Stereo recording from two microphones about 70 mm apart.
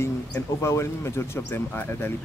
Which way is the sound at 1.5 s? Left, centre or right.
Left.